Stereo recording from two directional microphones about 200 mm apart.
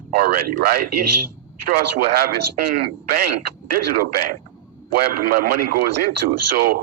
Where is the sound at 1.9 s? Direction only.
50° right (ahead or behind).